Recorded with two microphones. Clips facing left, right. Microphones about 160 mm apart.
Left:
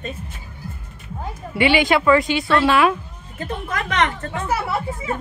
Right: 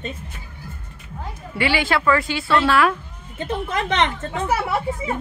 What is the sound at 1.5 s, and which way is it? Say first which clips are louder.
Speech: left 4 dB; 20° left (ahead or behind).